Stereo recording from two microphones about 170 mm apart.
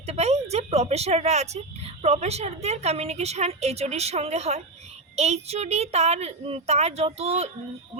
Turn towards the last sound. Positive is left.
turn(degrees=-35)  # may be behind; listen again after turning